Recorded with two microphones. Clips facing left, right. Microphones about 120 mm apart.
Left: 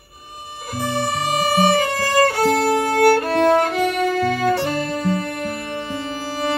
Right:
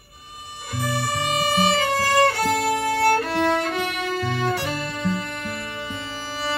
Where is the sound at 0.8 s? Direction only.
40° left (ahead or behind).